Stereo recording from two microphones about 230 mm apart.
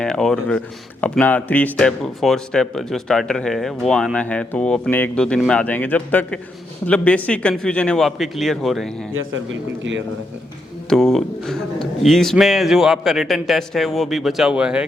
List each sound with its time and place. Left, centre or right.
0.0 s speech: centre
9.1 s speech: right
10.8 s speech: centre